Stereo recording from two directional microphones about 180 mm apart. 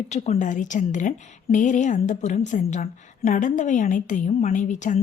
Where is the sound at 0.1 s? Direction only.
40° left (ahead or behind).